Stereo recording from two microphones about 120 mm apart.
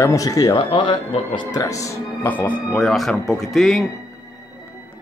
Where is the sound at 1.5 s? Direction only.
30° left (ahead or behind).